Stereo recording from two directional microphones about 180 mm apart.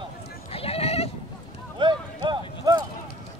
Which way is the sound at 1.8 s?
25° right (ahead or behind).